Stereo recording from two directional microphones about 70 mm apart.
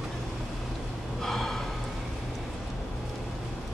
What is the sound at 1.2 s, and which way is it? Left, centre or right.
Gasp, centre.